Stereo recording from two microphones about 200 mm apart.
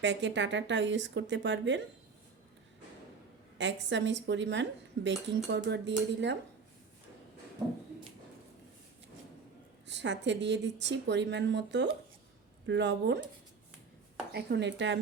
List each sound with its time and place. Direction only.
0.0 s a woman's voice: 60° right (ahead or behind)
3.6 s a woman's voice: 65° right (ahead or behind)
9.8 s a woman's voice: 60° right (ahead or behind)
14.3 s a woman's voice: 60° right (ahead or behind)